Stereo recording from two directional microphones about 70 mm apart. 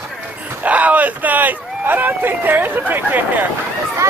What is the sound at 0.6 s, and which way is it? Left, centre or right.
Speech, right.